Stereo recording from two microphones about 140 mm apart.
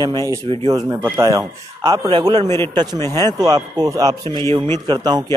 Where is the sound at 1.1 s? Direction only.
25° right (ahead or behind).